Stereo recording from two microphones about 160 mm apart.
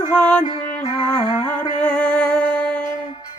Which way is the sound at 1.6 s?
5° left (ahead or behind).